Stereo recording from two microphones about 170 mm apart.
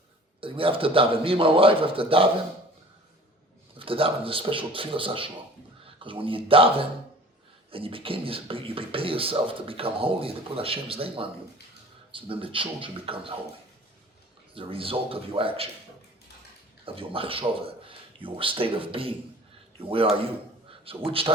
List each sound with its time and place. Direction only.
0.4 s speech: 30° right (ahead or behind)
3.8 s speech: 30° right (ahead or behind)
14.5 s speech: 30° right (ahead or behind)
16.8 s speech: 30° right (ahead or behind)